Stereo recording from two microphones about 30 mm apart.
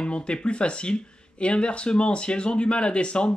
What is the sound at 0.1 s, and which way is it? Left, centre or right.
Speech, left.